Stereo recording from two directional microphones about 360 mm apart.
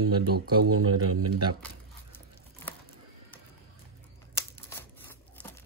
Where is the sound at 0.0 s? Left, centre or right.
Right.